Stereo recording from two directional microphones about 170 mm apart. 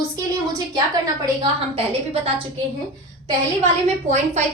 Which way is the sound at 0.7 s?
25° right (ahead or behind).